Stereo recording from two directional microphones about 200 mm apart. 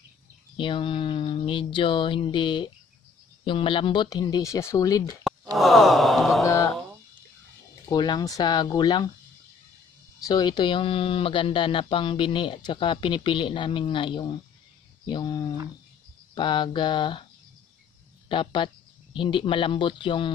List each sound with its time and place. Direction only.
0.6 s speech: 25° left (ahead or behind)
5.5 s sigh: centre (ahead or behind)
6.4 s mantra: 15° left (ahead or behind)
7.9 s speech: 20° left (ahead or behind)
10.2 s speech: 20° left (ahead or behind)
18.3 s speech: 25° left (ahead or behind)